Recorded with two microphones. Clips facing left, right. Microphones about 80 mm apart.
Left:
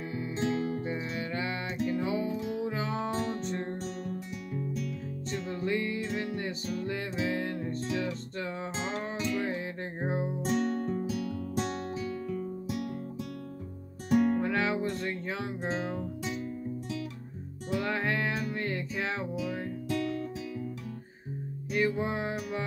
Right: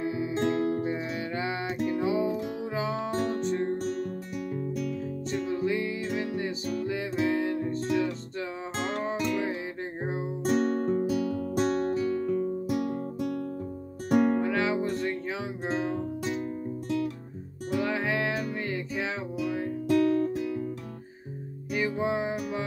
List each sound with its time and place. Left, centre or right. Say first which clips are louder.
0.0 s music: right 6 dB; centre
0.4 s music: right 4 dB; right
1.1 s music: right 2 dB; centre
5.3 s music: right 3 dB; centre
8.7 s music: right 5 dB; right
10.4 s music: right 7 dB; right
14.4 s music: right 2 dB; centre
17.7 s music: right 2 dB; centre
19.9 s music: right 10 dB; right
21.7 s music: right 1 dB; centre